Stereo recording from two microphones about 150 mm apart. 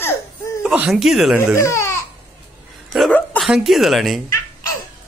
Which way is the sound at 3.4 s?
Centre (ahead or behind).